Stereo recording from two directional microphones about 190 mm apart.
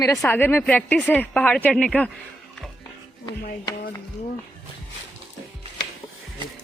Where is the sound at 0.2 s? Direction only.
10° left (ahead or behind).